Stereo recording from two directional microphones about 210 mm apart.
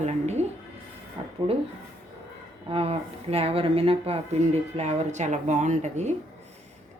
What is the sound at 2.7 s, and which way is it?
Speech, 30° right (ahead or behind).